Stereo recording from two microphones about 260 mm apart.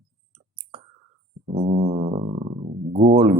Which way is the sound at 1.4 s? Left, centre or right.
Right.